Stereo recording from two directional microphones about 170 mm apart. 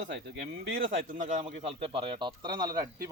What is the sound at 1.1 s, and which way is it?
A man's voice, 45° right (ahead or behind).